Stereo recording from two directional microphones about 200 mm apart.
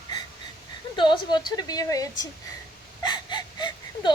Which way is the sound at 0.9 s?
25° left (ahead or behind).